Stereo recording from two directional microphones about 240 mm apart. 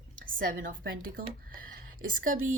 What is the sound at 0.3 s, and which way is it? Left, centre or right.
Speech, right.